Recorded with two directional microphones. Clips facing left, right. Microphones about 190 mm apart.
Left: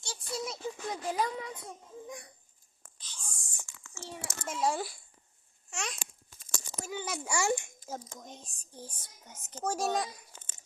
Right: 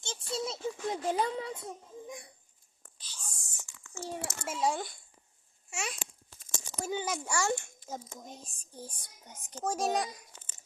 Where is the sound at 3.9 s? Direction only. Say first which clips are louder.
Right 6 dB; 40° right (ahead or behind).